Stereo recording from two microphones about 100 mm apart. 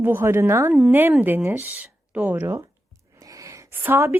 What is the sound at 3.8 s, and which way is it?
Speech, 20° right (ahead or behind).